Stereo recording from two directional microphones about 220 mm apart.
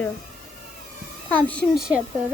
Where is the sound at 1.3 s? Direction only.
5° left (ahead or behind).